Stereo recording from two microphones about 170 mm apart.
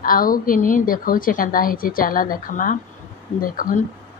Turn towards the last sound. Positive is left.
turn(degrees=55)  # may be behind; listen again after turning